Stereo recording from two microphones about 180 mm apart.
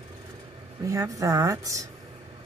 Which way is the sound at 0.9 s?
20° right (ahead or behind).